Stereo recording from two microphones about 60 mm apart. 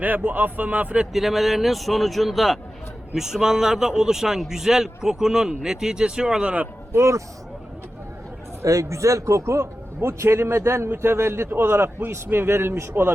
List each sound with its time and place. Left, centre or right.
0.0 s speech: right
1.1 s a man's voice: centre
6.9 s a man's voice: right
8.6 s a man's voice: right